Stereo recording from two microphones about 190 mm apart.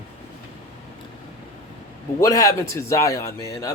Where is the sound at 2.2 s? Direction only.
20° left (ahead or behind).